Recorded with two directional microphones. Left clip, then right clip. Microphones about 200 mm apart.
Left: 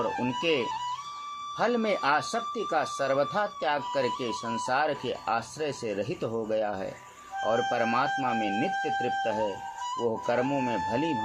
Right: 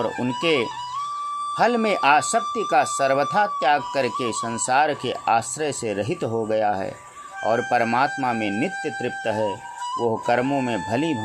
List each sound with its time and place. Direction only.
0.0 s speech: 20° right (ahead or behind)